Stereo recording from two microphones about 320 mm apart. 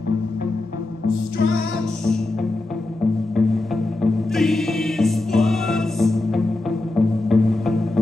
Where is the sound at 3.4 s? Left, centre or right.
Centre.